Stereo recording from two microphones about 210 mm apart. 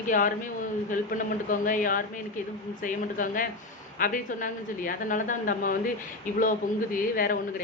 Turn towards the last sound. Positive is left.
turn(degrees=45)  # may be behind; listen again after turning